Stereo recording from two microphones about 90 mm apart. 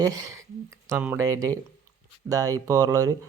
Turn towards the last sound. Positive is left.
turn(degrees=-45)  # may be behind; listen again after turning